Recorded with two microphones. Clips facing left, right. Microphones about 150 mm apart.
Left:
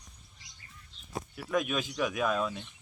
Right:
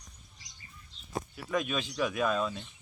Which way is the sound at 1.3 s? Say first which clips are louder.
Left 2 dB; centre (ahead or behind).